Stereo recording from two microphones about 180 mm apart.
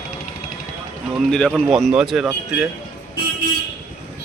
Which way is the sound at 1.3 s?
Centre (ahead or behind).